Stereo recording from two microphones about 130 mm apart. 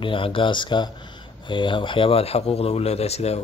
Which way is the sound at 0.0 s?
40° left (ahead or behind).